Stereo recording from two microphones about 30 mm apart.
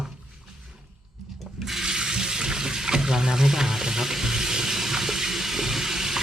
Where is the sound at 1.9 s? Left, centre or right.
Right.